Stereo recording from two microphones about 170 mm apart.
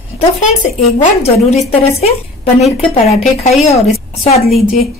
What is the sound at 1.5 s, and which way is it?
Speech, 40° left (ahead or behind).